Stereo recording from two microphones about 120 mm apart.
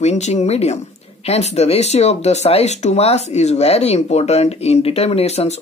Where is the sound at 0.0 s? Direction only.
65° left (ahead or behind).